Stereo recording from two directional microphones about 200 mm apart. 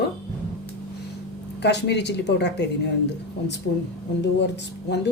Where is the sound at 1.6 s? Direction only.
60° left (ahead or behind).